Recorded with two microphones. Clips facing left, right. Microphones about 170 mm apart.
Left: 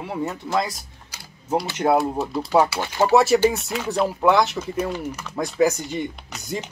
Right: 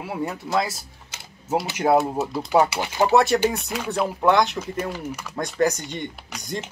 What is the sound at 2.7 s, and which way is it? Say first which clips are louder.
Speech: left 1 dB; 15° right (ahead or behind).